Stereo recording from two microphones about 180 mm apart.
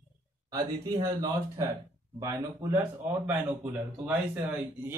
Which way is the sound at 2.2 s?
15° right (ahead or behind).